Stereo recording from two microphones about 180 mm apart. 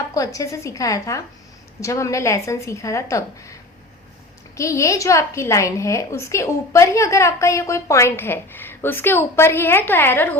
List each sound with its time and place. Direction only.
0.1 s a woman's voice: 20° left (ahead or behind)
4.5 s a woman's voice: 15° left (ahead or behind)